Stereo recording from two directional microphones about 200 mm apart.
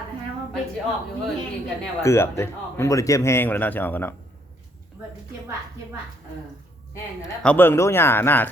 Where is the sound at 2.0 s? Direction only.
15° left (ahead or behind).